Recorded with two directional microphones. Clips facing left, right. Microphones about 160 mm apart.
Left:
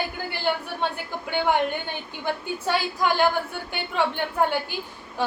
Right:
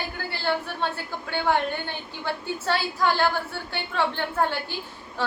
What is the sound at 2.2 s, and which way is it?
A woman's voice, 15° left (ahead or behind).